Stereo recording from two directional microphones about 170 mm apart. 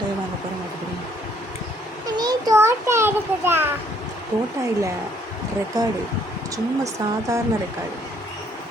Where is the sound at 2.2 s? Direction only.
20° right (ahead or behind).